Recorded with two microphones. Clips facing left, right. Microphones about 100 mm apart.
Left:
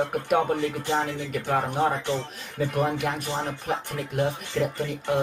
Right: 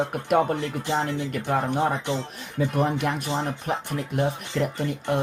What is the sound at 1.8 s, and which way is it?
Speech, 15° right (ahead or behind).